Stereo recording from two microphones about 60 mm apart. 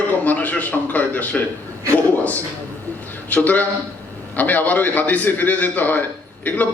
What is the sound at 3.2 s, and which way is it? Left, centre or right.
A man's voice, left.